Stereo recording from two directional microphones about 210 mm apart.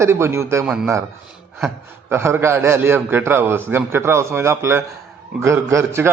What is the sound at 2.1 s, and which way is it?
A man's voice, 10° right (ahead or behind).